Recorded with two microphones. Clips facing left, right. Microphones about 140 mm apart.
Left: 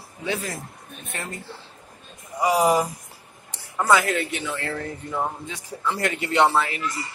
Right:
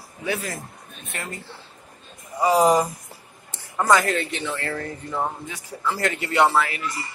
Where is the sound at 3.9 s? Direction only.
10° left (ahead or behind).